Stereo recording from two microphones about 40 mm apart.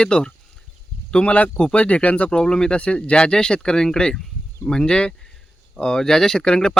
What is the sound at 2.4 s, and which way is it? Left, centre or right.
Speech, centre.